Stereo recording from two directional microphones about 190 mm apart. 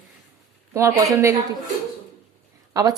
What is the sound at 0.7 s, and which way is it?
Speech, 15° right (ahead or behind).